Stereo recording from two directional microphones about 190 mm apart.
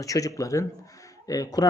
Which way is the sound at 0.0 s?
15° left (ahead or behind).